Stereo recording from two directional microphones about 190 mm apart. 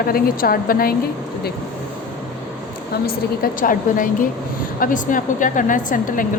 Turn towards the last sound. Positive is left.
turn(degrees=45)  # may be behind; listen again after turning